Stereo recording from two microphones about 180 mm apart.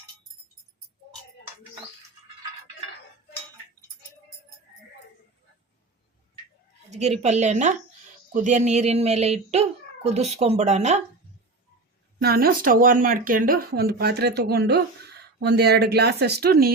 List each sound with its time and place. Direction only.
6.9 s speech: 40° right (ahead or behind)
12.2 s speech: 55° right (ahead or behind)